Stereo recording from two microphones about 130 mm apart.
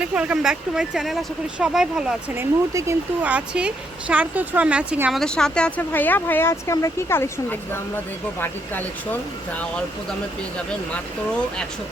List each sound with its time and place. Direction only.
0.0 s speech: 10° right (ahead or behind)
2.3 s speech: 20° right (ahead or behind)
3.2 s speech: 10° right (ahead or behind)
5.1 s speech: 5° left (ahead or behind)